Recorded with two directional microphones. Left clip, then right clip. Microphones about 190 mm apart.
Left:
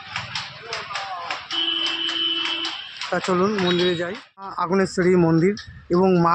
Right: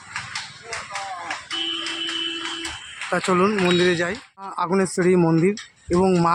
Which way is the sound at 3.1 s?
10° right (ahead or behind).